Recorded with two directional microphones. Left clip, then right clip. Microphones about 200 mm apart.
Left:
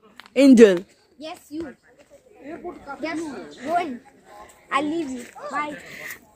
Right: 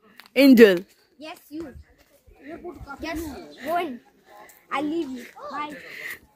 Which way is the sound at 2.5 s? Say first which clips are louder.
Left 3 dB; 45° right (ahead or behind).